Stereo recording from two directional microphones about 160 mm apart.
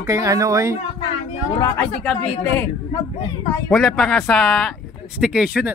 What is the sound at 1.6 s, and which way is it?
Speech, 10° left (ahead or behind).